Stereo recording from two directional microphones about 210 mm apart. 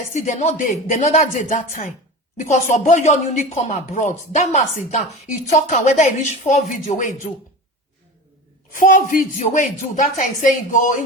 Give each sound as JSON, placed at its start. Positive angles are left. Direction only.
{"t": 0.1, "sound": "speech", "side_deg": 35}
{"t": 8.7, "sound": "speech", "side_deg": 40}